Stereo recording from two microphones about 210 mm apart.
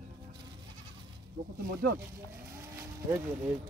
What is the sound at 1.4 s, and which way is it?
Speech, 45° right (ahead or behind).